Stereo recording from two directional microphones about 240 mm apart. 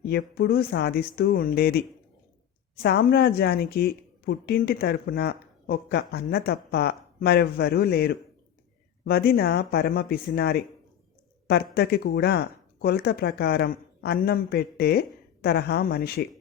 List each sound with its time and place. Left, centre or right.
0.0 s speech: left